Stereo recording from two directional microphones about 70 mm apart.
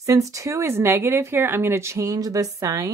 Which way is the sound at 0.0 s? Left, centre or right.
Right.